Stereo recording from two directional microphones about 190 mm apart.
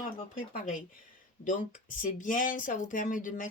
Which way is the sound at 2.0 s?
45° left (ahead or behind).